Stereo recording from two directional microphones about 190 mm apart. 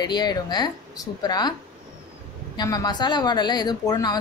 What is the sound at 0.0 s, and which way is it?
A woman's voice, 20° left (ahead or behind).